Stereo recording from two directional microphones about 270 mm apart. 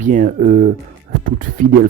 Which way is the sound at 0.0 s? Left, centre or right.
Right.